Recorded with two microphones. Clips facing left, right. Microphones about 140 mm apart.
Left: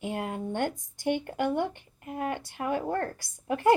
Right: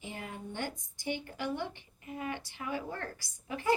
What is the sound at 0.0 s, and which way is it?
Speech, 60° left (ahead or behind).